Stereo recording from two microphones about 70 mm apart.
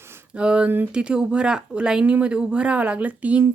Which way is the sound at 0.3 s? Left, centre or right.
Centre.